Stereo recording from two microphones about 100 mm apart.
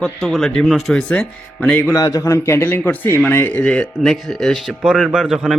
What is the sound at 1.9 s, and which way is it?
A man's voice, 35° left (ahead or behind).